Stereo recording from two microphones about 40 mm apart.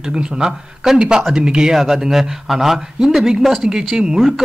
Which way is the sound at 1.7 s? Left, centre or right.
Centre.